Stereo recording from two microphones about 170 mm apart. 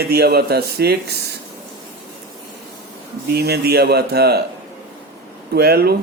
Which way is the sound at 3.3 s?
70° right (ahead or behind).